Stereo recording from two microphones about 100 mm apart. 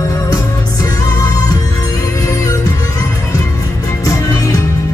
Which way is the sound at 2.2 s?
35° left (ahead or behind).